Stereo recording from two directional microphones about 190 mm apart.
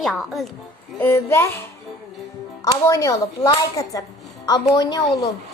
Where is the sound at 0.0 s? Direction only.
Centre (ahead or behind).